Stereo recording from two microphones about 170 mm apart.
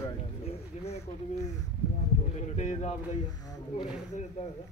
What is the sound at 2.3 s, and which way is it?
Speech, 45° left (ahead or behind).